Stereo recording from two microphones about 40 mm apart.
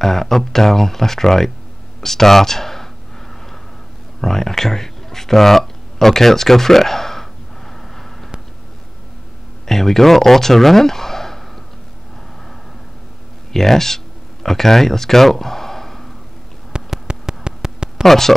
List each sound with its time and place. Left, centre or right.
0.0 s speech: centre
4.2 s a sound: centre
9.7 s speech: centre
13.5 s speech: centre
16.7 s a sound: right
18.0 s speech: centre